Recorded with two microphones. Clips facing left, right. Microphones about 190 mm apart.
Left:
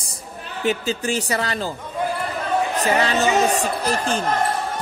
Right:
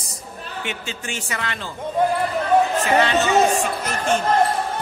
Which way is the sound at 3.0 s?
35° left (ahead or behind).